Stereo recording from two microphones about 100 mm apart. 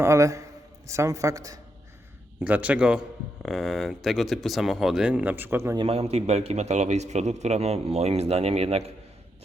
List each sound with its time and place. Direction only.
0.0 s a man's voice: 30° right (ahead or behind)
2.4 s speech: 15° right (ahead or behind)
3.4 s speech: centre (ahead or behind); by 5.7 s 25° right (ahead or behind)
5.9 s a man's voice: 90° right